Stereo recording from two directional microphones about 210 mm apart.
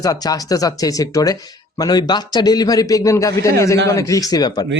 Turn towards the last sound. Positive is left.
turn(degrees=20)  # may be behind; listen again after turning